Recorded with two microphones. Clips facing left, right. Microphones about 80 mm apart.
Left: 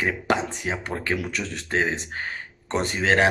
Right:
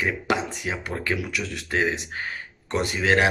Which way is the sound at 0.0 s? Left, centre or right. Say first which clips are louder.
Left 1 dB; left.